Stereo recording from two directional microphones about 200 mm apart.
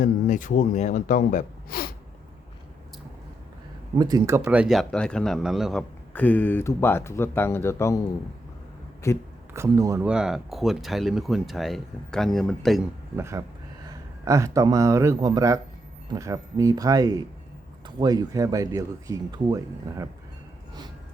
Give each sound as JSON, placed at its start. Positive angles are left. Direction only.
{"t": 0.0, "sound": "a man's voice", "side_deg": 40}
{"t": 3.9, "sound": "speech", "side_deg": -20}
{"t": 9.0, "sound": "speech", "side_deg": 15}
{"t": 9.5, "sound": "speech", "side_deg": -15}
{"t": 10.1, "sound": "speech", "side_deg": -5}
{"t": 13.1, "sound": "speech", "side_deg": -15}